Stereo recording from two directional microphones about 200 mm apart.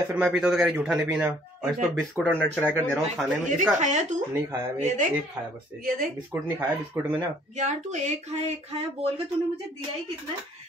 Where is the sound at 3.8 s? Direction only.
35° right (ahead or behind).